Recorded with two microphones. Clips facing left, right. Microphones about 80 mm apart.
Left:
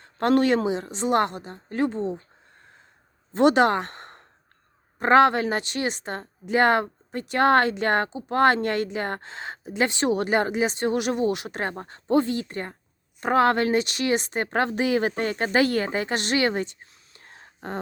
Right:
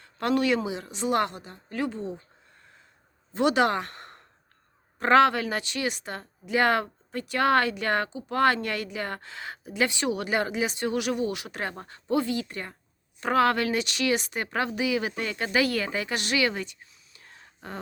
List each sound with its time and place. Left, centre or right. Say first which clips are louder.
0.0 s speech: left 5 dB; left
3.3 s speech: left 4 dB; left
16.8 s whispering: left 3 dB; left